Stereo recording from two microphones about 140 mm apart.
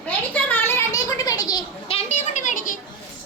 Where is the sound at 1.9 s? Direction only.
50° left (ahead or behind); by 2.7 s 65° left (ahead or behind).